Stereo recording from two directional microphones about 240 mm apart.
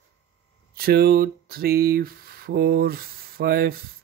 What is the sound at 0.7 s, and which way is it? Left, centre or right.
Speech, right.